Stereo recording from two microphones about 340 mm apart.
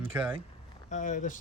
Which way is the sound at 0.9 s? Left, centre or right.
Left.